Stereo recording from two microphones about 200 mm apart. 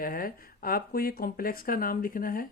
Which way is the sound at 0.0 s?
45° left (ahead or behind).